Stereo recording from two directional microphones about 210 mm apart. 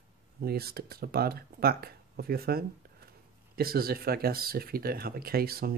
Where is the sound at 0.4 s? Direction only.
45° right (ahead or behind).